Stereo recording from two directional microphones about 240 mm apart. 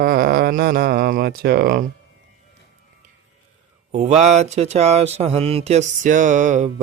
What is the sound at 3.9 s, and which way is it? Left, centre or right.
Speech, right.